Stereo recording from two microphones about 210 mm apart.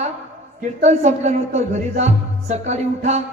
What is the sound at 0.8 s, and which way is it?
A woman's voice, 30° right (ahead or behind).